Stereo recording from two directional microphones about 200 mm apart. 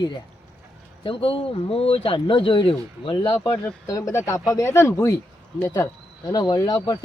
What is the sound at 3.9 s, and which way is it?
Speech, 15° left (ahead or behind).